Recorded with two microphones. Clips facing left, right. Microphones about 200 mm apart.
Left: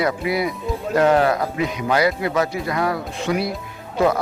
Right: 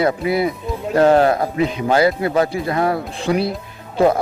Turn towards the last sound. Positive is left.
turn(degrees=-30)  # may be behind; listen again after turning